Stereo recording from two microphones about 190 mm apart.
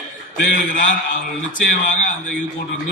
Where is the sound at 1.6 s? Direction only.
45° left (ahead or behind).